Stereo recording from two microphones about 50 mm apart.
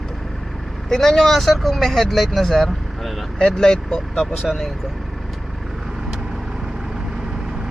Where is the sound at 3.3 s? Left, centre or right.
Centre.